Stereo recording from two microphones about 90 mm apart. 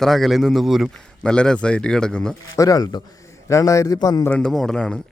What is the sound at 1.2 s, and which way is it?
A man's voice, 10° left (ahead or behind).